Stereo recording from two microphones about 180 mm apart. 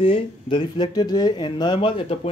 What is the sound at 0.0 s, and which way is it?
Speech, 30° left (ahead or behind).